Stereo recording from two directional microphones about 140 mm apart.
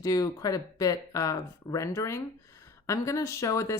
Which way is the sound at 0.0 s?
25° left (ahead or behind).